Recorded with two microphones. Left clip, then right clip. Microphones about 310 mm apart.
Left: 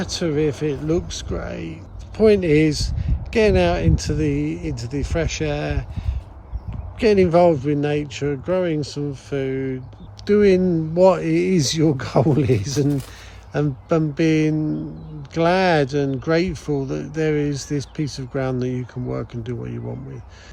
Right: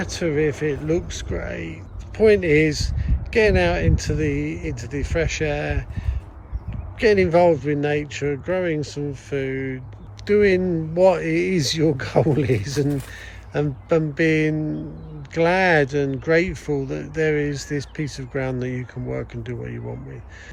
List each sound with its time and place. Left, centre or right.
0.0 s speech: centre